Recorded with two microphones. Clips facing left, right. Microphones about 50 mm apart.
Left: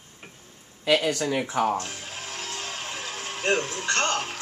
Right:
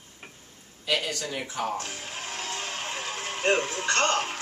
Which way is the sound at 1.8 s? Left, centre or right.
Centre.